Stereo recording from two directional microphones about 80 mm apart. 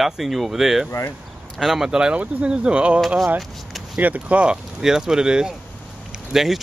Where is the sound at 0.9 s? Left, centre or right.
Left.